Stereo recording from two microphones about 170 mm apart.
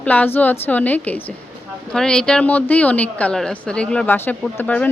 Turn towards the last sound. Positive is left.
turn(degrees=10)  # may be behind; listen again after turning